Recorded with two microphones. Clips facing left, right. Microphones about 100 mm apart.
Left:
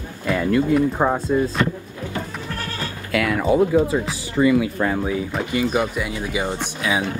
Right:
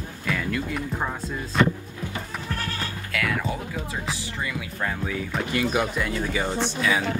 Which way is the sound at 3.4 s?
90° left.